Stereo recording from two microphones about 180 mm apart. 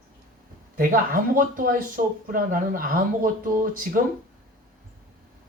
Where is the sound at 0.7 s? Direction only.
50° right (ahead or behind).